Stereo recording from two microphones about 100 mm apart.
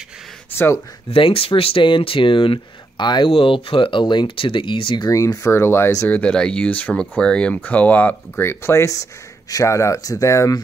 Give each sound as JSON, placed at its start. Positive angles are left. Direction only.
{"t": 0.5, "sound": "speech", "side_deg": 20}
{"t": 1.1, "sound": "speech", "side_deg": 65}
{"t": 3.3, "sound": "speech", "side_deg": 65}
{"t": 5.0, "sound": "speech", "side_deg": 30}
{"t": 6.0, "sound": "speech", "side_deg": 15}